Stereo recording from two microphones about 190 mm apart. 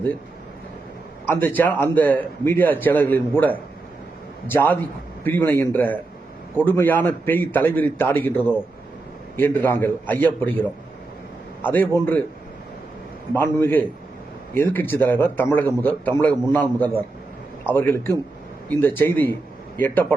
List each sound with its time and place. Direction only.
1.3 s a man's voice: 10° left (ahead or behind)
13.3 s a man's voice: 10° left (ahead or behind)